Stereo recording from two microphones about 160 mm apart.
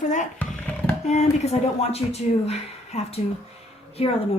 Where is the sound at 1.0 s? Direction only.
45° left (ahead or behind).